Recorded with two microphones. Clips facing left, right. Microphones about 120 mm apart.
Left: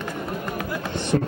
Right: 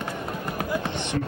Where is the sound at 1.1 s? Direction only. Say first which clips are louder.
Left 7 dB; 45° left (ahead or behind).